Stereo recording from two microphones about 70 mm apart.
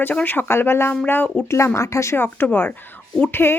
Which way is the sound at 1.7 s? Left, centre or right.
Left.